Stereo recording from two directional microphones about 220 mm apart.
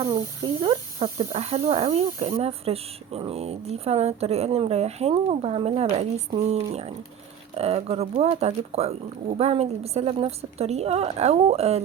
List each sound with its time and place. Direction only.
0.0 s speech: 20° right (ahead or behind)